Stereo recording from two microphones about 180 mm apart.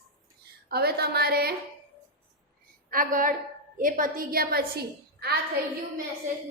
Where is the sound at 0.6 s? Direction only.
60° right (ahead or behind).